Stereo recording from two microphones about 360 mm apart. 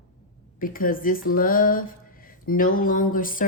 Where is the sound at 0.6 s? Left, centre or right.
Left.